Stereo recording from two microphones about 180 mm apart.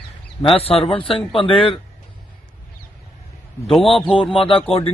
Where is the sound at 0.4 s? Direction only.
30° left (ahead or behind).